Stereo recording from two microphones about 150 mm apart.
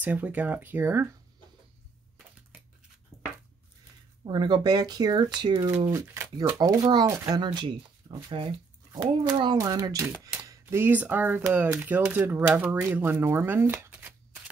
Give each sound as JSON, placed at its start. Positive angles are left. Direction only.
{"t": 0.0, "sound": "speech", "side_deg": -10}
{"t": 4.2, "sound": "speech", "side_deg": -30}